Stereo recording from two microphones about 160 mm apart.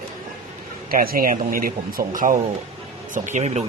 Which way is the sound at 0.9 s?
65° right (ahead or behind).